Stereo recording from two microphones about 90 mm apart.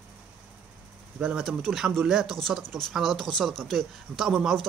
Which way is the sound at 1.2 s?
10° right (ahead or behind).